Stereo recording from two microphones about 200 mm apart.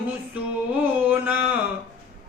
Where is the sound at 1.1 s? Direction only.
10° right (ahead or behind).